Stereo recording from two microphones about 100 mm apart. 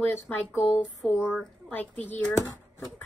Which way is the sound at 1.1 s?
5° right (ahead or behind).